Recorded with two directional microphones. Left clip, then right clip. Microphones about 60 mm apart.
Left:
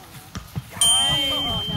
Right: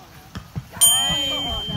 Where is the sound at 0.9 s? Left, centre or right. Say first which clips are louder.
Left 2 dB; left.